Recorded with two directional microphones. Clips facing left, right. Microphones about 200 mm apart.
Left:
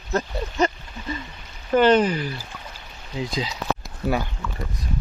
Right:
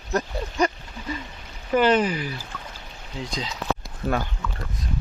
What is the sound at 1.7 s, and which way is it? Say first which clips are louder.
Speech: left 3 dB; 5° right (ahead or behind).